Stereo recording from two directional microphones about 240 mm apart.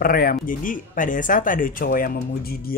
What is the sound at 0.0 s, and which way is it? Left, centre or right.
Speech, left.